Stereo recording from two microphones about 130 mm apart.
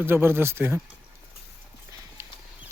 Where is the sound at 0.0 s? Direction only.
15° right (ahead or behind).